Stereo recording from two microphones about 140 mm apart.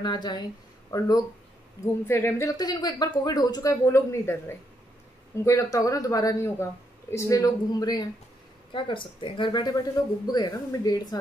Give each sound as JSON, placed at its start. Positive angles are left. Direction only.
{"t": 0.0, "sound": "speech", "side_deg": 30}
{"t": 2.5, "sound": "speech", "side_deg": 30}